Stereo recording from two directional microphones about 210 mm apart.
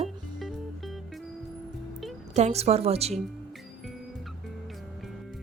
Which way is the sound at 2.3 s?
30° right (ahead or behind).